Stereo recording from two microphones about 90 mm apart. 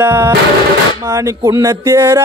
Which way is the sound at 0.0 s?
25° right (ahead or behind).